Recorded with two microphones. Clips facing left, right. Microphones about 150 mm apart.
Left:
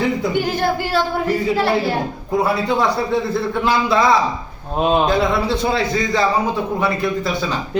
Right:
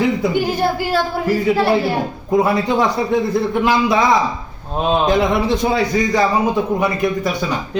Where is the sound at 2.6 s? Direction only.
15° right (ahead or behind).